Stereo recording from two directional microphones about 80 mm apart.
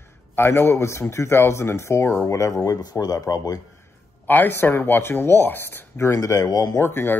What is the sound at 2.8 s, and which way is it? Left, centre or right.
Speech, left.